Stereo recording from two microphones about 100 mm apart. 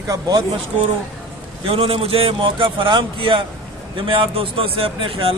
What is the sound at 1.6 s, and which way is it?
A man's voice, 70° right (ahead or behind).